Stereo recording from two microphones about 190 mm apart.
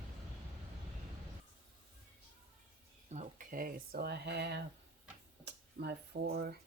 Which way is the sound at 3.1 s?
40° right (ahead or behind).